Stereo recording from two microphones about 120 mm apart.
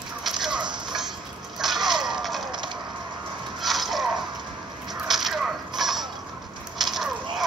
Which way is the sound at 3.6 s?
Centre (ahead or behind).